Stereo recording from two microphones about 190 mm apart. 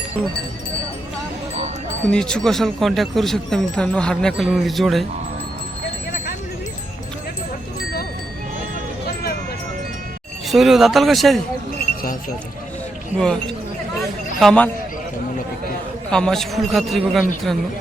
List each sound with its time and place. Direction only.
2.0 s speech: 5° left (ahead or behind)
10.5 s speech: centre (ahead or behind)
13.1 s speech: 5° left (ahead or behind)
16.0 s speech: 5° left (ahead or behind)